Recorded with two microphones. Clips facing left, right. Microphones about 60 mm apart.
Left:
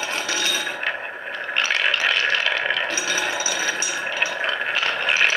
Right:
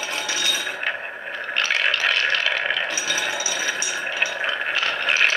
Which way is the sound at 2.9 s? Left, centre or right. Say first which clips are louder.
Left 1 dB; left.